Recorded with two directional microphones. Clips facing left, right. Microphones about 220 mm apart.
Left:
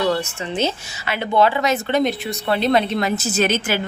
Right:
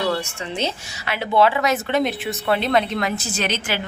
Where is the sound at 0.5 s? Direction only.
Centre (ahead or behind).